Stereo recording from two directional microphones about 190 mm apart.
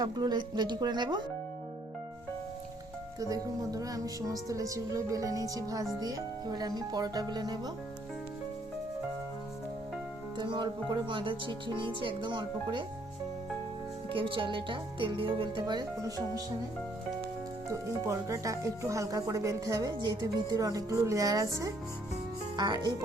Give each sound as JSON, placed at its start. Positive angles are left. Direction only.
{"t": 0.0, "sound": "speech", "side_deg": -20}
{"t": 3.2, "sound": "speech", "side_deg": -20}
{"t": 10.3, "sound": "speech", "side_deg": -25}
{"t": 14.1, "sound": "speech", "side_deg": -25}
{"t": 17.7, "sound": "speech", "side_deg": -15}